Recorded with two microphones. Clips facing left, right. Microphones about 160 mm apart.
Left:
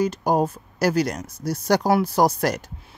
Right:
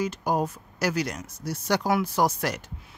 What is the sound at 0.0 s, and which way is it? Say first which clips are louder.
Speech: left 5 dB; 35° left (ahead or behind).